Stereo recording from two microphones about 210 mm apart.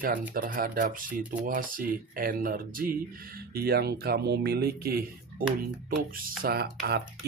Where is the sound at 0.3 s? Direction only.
40° right (ahead or behind).